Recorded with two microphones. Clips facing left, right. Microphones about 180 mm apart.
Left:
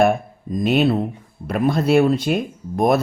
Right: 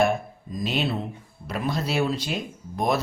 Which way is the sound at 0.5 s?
55° left (ahead or behind).